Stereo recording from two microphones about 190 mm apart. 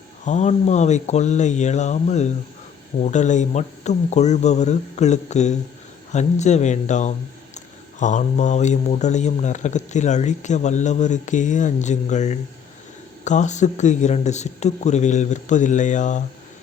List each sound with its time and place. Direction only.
0.3 s speech: 35° left (ahead or behind)